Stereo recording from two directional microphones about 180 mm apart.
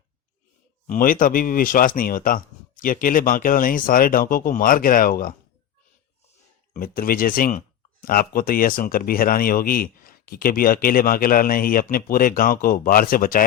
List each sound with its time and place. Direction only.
0.9 s speech: 50° left (ahead or behind)
6.7 s speech: 55° left (ahead or behind)